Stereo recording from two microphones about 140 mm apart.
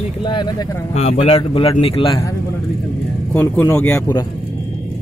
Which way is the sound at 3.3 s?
15° left (ahead or behind).